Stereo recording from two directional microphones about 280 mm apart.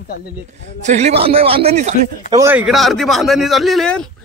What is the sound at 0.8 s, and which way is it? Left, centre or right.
Speech, right.